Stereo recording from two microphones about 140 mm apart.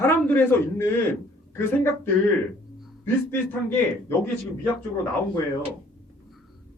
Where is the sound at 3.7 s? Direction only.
15° left (ahead or behind).